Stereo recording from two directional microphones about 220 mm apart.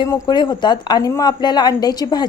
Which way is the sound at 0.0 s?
15° left (ahead or behind).